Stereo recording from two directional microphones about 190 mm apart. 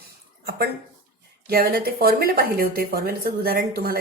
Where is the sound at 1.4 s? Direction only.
50° right (ahead or behind).